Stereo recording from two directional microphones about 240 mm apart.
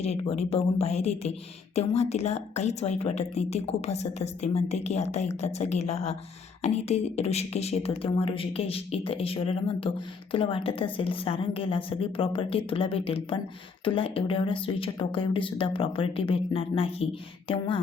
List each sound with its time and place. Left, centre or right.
0.0 s speech: left